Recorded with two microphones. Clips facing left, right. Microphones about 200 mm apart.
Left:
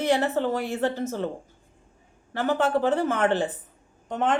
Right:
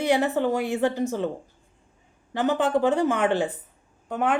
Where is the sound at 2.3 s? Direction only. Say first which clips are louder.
Right 1 dB; 15° right (ahead or behind).